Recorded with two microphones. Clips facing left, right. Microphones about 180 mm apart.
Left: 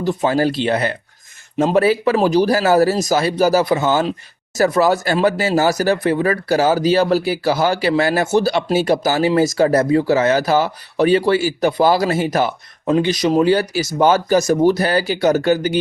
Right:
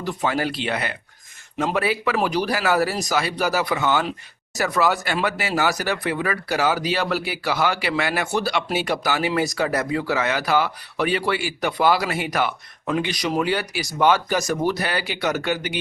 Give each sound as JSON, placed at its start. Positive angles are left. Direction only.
{"t": 0.0, "sound": "speech", "side_deg": 25}